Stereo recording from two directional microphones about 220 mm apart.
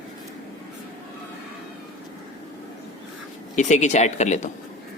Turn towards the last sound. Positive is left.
turn(degrees=30)  # may be behind; listen again after turning